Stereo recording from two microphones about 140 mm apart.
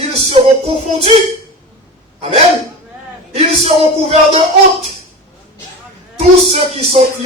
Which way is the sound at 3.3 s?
45° right (ahead or behind).